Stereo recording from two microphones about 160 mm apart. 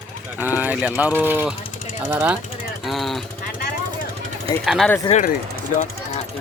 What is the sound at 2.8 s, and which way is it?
Jackhammer, centre (ahead or behind).